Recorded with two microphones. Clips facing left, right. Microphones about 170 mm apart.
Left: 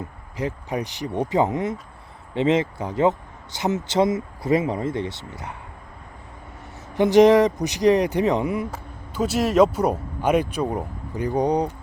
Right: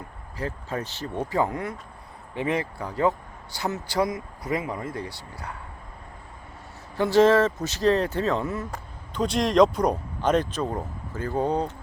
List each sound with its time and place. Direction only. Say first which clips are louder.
0.3 s speech: left 4 dB; 15° left (ahead or behind)
6.9 s speech: left 4 dB; 20° left (ahead or behind)